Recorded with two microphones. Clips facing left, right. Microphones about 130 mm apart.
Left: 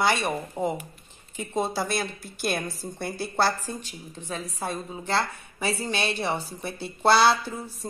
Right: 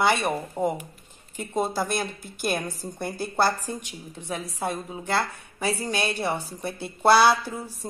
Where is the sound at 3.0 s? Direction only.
50° right (ahead or behind).